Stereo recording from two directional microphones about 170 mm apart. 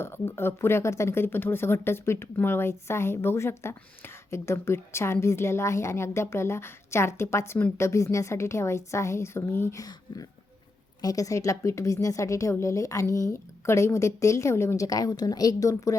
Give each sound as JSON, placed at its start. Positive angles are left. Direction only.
{"t": 0.0, "sound": "a woman's voice", "side_deg": 15}